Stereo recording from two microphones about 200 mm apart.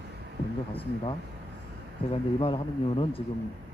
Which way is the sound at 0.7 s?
30° left (ahead or behind).